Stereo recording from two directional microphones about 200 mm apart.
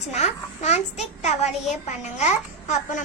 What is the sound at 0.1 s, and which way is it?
A child's voice, 35° left (ahead or behind).